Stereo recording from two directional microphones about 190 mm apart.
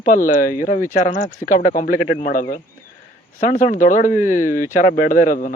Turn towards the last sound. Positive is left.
turn(degrees=45)  # may be behind; listen again after turning